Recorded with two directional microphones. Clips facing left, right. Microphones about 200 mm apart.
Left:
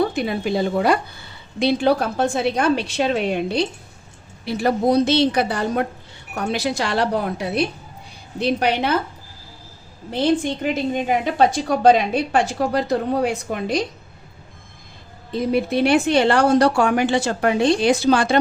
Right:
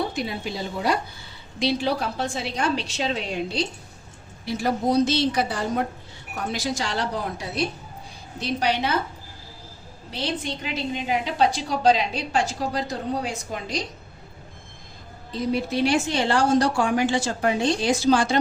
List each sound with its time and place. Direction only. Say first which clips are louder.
0.0 s a woman's voice: left 7 dB; 55° left (ahead or behind)
10.1 s a woman's voice: left 10 dB; 50° left (ahead or behind)
15.3 s a woman's voice: left 5 dB; 55° left (ahead or behind)